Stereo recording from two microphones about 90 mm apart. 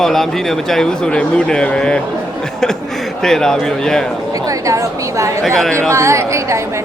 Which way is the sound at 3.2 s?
5° left (ahead or behind).